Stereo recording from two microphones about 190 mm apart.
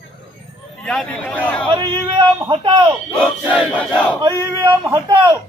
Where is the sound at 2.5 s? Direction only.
25° right (ahead or behind).